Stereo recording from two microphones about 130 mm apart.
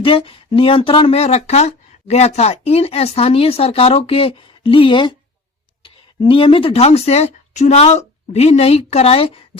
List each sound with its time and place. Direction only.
0.0 s speech: 45° left (ahead or behind)